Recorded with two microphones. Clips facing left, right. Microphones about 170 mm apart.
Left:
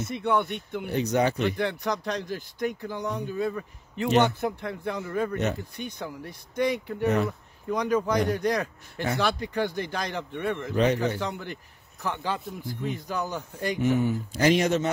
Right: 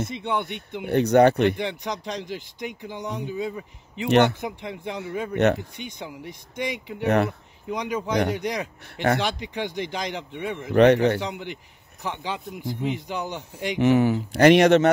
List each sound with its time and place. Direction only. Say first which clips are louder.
0.1 s speech: left 2 dB; 20° right (ahead or behind)
0.8 s speech: right 8 dB; 60° right (ahead or behind)
1.6 s speech: left 1 dB; 20° right (ahead or behind)
4.1 s speech: right 4 dB; 70° right (ahead or behind)
4.4 s speech: left 2 dB; 15° right (ahead or behind)
7.0 s speech: right 4 dB; 70° right (ahead or behind)
7.7 s speech: left 1 dB; 20° right (ahead or behind)
10.7 s speech: right 9 dB; 70° right (ahead or behind)
11.1 s speech: right 2 dB; 20° right (ahead or behind)
13.7 s speech: right 6 dB; 85° right